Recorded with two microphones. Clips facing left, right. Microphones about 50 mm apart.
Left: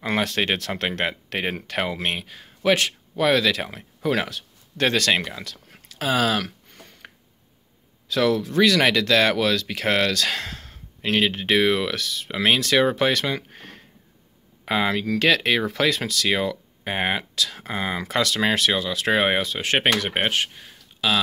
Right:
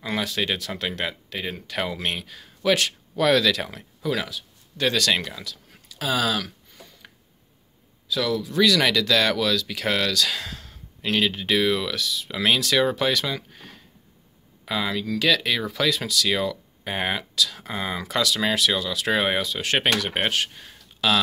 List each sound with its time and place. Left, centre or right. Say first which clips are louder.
0.0 s speech: left 3 dB; left
1.8 s speech: left 1 dB; left
4.0 s speech: left 3 dB; left
5.4 s speech: left 1 dB; left
6.7 s a sound: left 2 dB; left
8.1 s speech: left 4 dB; left
12.3 s speech: left 2 dB; left
18.7 s speech: left 2 dB; left
20.5 s a sound: even; centre